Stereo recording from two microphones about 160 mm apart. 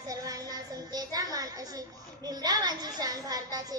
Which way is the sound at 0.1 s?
25° right (ahead or behind).